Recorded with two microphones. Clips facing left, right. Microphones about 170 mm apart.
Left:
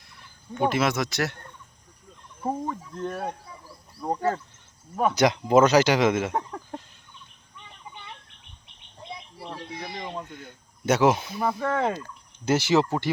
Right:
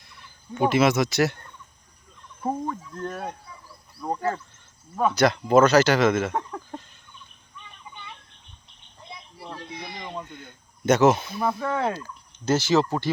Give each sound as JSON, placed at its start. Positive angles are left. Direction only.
{"t": 0.0, "sound": "speech", "side_deg": 0}
{"t": 2.4, "sound": "speech", "side_deg": 5}
{"t": 4.0, "sound": "speech", "side_deg": 15}
{"t": 9.4, "sound": "a sound", "side_deg": 10}
{"t": 12.5, "sound": "speech", "side_deg": 20}